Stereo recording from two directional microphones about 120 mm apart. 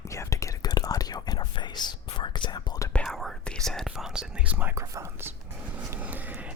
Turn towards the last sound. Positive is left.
turn(degrees=-15)  # may be behind; listen again after turning